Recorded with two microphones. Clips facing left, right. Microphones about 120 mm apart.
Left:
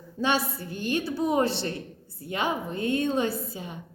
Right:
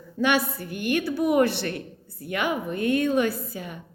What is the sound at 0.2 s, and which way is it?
A woman's voice, 30° left (ahead or behind).